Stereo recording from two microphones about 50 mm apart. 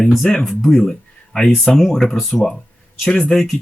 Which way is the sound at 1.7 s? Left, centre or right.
Centre.